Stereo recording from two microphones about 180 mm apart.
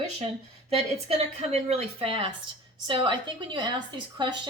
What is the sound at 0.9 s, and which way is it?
A woman's voice, 35° right (ahead or behind).